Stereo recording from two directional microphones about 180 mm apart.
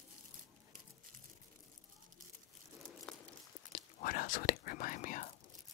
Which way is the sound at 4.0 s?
50° left (ahead or behind).